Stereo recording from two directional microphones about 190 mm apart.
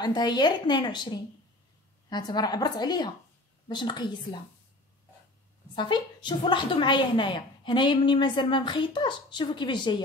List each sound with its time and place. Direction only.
0.0 s a woman's voice: 20° left (ahead or behind)
5.8 s a woman's voice: 25° left (ahead or behind)